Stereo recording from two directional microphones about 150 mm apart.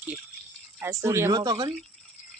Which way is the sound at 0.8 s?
20° right (ahead or behind).